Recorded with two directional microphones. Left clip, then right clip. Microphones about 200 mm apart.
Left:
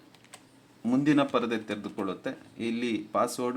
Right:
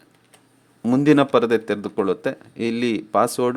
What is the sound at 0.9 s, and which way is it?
Speech, 45° right (ahead or behind).